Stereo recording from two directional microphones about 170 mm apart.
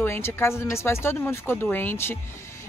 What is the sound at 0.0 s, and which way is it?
Speech, 15° left (ahead or behind).